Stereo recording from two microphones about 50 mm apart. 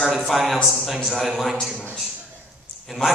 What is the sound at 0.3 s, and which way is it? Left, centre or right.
A man's voice, centre.